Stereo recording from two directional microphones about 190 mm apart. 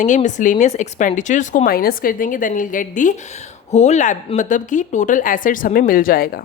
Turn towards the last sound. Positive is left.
turn(degrees=50)  # may be behind; listen again after turning